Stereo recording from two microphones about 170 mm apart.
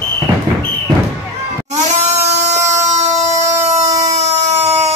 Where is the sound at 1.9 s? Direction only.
40° right (ahead or behind).